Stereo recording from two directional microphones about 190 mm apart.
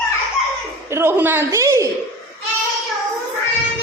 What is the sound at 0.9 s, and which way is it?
A man's voice, 15° right (ahead or behind).